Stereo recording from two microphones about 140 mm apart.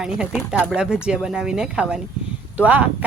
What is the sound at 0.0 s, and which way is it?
Speech, 5° right (ahead or behind).